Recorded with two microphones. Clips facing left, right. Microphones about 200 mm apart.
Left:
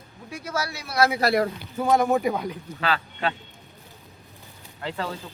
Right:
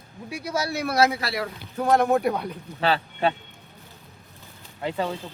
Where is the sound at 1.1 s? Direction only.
45° left (ahead or behind).